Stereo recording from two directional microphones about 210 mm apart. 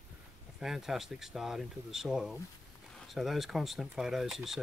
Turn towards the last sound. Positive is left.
turn(degrees=0)  # may be behind; listen again after turning